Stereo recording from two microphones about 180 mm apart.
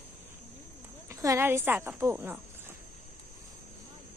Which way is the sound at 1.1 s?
15° right (ahead or behind).